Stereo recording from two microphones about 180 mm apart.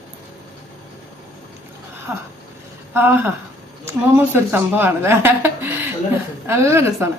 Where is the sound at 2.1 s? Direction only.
15° right (ahead or behind).